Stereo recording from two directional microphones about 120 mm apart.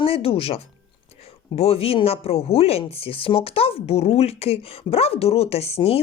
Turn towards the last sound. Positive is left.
turn(degrees=55)  # may be behind; listen again after turning